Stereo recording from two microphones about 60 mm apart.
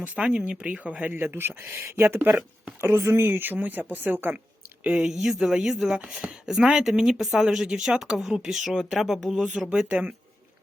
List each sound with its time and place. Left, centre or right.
0.0 s speech: centre
1.2 s speech: right
4.8 s speech: centre
5.0 s speech: centre
9.9 s speech: right